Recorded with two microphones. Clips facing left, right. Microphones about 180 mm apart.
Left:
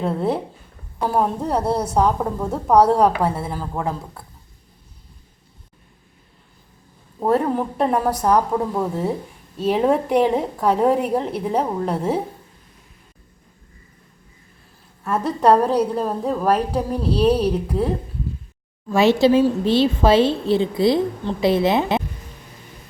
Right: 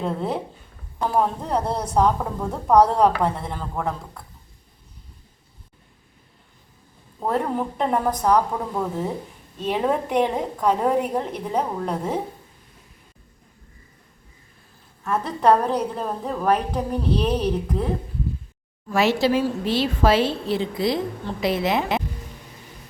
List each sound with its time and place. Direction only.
0.0 s a woman's voice: 5° left (ahead or behind)
7.2 s a woman's voice: 5° left (ahead or behind)
15.0 s a woman's voice: 10° left (ahead or behind)
18.9 s a woman's voice: 25° left (ahead or behind)